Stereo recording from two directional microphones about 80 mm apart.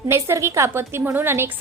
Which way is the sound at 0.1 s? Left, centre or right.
Right.